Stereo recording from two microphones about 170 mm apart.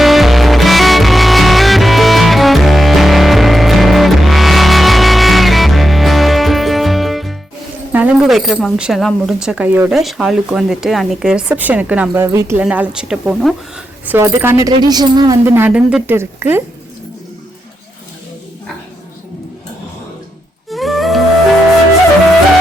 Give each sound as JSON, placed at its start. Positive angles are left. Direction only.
{"t": 0.0, "sound": "music", "side_deg": 0}
{"t": 7.9, "sound": "a woman's voice", "side_deg": -5}
{"t": 15.4, "sound": "speech", "side_deg": -10}
{"t": 20.7, "sound": "music", "side_deg": 0}